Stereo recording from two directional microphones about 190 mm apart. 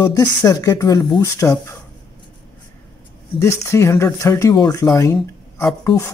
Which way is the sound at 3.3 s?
15° left (ahead or behind).